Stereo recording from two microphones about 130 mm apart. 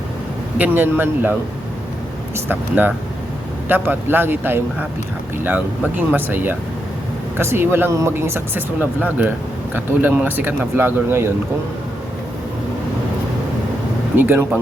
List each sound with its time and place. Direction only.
0.6 s speech: 15° right (ahead or behind)
14.2 s speech: 15° right (ahead or behind)